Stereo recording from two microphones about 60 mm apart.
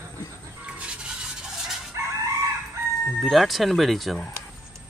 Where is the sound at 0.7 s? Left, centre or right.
Centre.